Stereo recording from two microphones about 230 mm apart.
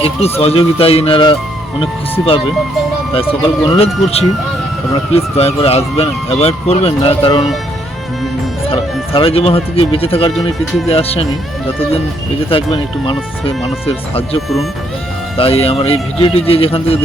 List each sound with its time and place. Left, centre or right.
0.3 s speech: left
3.2 s speech: left
8.7 s speech: left
12.5 s speech: left
15.4 s speech: left